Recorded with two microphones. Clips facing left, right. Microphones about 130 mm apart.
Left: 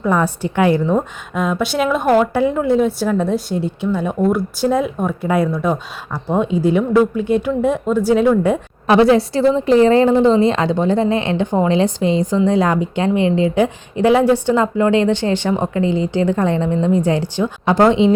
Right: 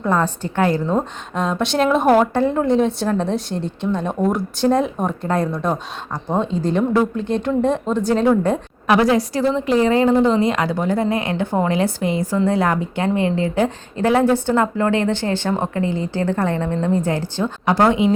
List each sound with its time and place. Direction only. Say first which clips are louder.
0.1 s speech: left 2 dB; 15° left (ahead or behind); by 2.2 s 5° right (ahead or behind)
2.3 s speech: left 1 dB; 10° left (ahead or behind)
8.9 s a woman's voice: left 4 dB; 30° left (ahead or behind)